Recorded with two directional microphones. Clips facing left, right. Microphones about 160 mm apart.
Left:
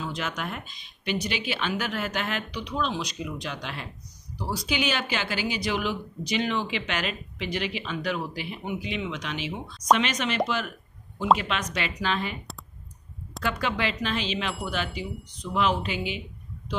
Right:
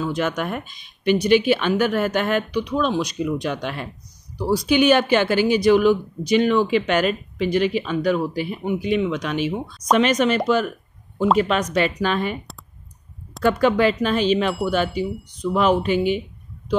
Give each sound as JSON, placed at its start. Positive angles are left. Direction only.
{"t": 0.0, "sound": "speech", "side_deg": -50}
{"t": 13.4, "sound": "speech", "side_deg": -50}